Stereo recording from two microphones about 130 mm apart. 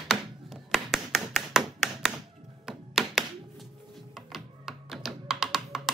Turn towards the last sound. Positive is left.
turn(degrees=-5)  # may be behind; listen again after turning